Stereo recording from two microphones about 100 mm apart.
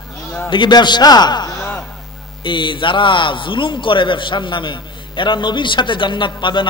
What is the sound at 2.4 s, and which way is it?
A man's voice, 55° left (ahead or behind).